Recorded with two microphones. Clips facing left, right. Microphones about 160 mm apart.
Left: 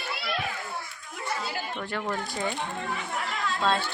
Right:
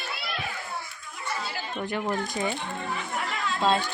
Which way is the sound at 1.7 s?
15° right (ahead or behind).